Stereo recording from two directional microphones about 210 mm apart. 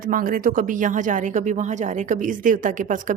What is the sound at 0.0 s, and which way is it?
A woman's voice, 40° right (ahead or behind).